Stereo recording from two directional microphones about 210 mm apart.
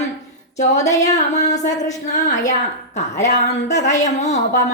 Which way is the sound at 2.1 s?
35° left (ahead or behind).